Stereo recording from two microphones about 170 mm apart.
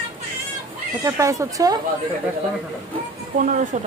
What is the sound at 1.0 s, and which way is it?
Speech, 20° right (ahead or behind).